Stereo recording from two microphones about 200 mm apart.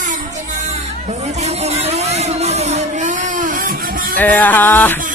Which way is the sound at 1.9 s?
30° right (ahead or behind).